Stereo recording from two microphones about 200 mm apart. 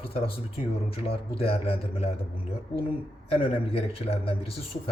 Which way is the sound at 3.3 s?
30° left (ahead or behind).